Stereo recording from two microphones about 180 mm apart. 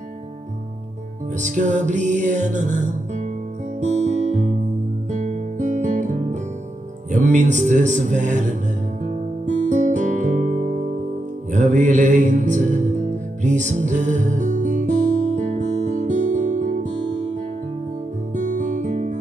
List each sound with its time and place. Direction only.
1.4 s music: 45° right (ahead or behind)
3.8 s music: 40° right (ahead or behind)
5.1 s guitar: 45° right (ahead or behind)
7.1 s speech: 40° right (ahead or behind)
9.0 s guitar: 40° right (ahead or behind)
11.5 s music: 40° right (ahead or behind)
18.3 s music: 45° right (ahead or behind)